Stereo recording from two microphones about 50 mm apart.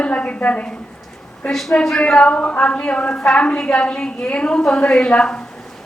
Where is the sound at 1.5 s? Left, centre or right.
Centre.